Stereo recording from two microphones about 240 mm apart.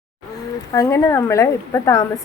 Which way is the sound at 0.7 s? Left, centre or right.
Centre.